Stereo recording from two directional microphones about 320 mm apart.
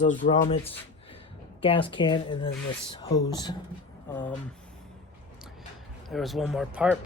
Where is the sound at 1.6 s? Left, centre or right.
Centre.